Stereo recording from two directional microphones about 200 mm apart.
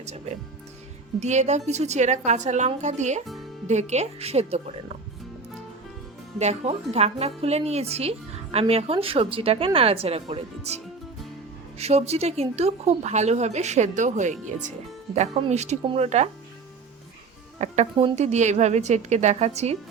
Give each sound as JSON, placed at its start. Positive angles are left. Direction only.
{"t": 0.0, "sound": "speech", "side_deg": -35}
{"t": 6.4, "sound": "a woman's voice", "side_deg": -35}
{"t": 11.8, "sound": "speech", "side_deg": -30}
{"t": 17.6, "sound": "speech", "side_deg": -35}